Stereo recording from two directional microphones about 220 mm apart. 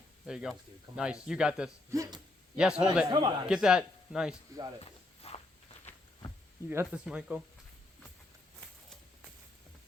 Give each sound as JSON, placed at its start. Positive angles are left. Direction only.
{"t": 0.3, "sound": "speech", "side_deg": -5}
{"t": 1.9, "sound": "speech", "side_deg": -15}
{"t": 2.6, "sound": "speech", "side_deg": -5}
{"t": 3.1, "sound": "a man's voice", "side_deg": -20}
{"t": 3.5, "sound": "speech", "side_deg": -5}
{"t": 4.8, "sound": "walk", "side_deg": 25}
{"t": 6.7, "sound": "speech", "side_deg": -5}